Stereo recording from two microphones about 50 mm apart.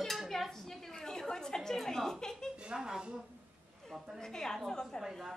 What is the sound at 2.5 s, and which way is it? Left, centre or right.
Speech, centre.